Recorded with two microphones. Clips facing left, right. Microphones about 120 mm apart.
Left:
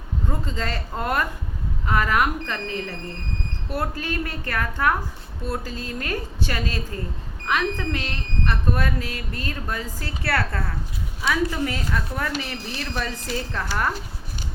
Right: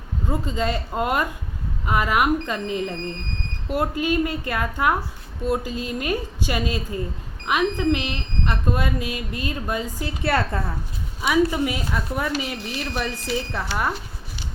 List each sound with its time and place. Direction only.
0.3 s speech: 15° right (ahead or behind)